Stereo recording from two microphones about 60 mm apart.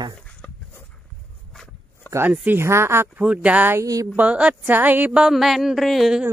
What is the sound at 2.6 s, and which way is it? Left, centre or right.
Speech, right.